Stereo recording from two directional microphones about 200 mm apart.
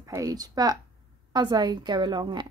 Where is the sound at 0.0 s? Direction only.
15° right (ahead or behind).